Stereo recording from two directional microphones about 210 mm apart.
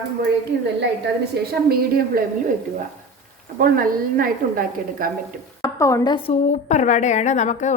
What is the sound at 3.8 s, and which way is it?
A woman's voice, 40° right (ahead or behind).